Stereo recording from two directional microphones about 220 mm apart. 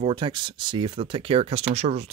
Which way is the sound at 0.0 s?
20° right (ahead or behind).